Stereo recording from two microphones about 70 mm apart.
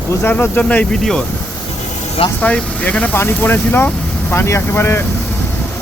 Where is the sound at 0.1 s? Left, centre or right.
Left.